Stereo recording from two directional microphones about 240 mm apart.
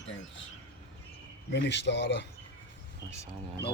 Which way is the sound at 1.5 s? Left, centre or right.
Left.